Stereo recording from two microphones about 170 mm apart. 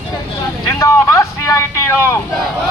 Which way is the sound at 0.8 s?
20° left (ahead or behind).